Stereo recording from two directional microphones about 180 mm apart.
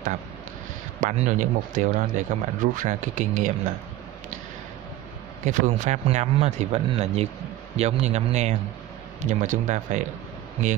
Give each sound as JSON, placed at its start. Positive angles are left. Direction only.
{"t": 1.0, "sound": "speech", "side_deg": -45}
{"t": 5.4, "sound": "speech", "side_deg": -40}